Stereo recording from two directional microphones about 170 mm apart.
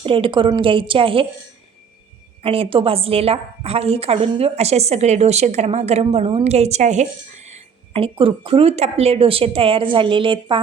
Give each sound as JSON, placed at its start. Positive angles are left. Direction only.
{"t": 0.0, "sound": "a woman's voice", "side_deg": -30}
{"t": 2.4, "sound": "a woman's voice", "side_deg": -35}